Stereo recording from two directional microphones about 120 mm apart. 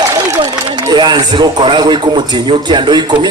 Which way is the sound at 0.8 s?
35° right (ahead or behind).